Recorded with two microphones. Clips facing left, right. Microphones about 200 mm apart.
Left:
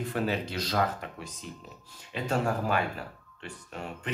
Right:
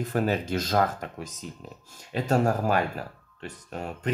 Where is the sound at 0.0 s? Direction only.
45° right (ahead or behind).